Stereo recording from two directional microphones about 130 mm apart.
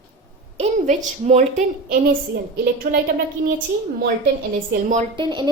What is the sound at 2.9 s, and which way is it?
Speech, 90° right.